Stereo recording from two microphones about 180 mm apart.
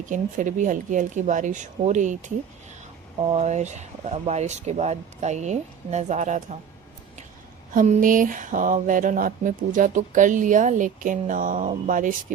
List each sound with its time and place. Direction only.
0.0 s speech: 45° right (ahead or behind)
3.2 s speech: 30° right (ahead or behind)
7.7 s speech: 50° right (ahead or behind)